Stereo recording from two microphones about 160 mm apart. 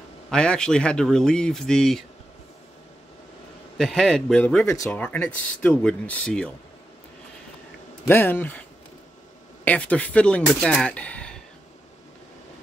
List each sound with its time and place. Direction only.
0.3 s speech: 5° left (ahead or behind)
3.7 s speech: 5° left (ahead or behind)
4.7 s speech: 20° left (ahead or behind)
5.0 s speech: 10° left (ahead or behind)
8.1 s speech: 15° left (ahead or behind)
9.7 s speech: 10° left (ahead or behind)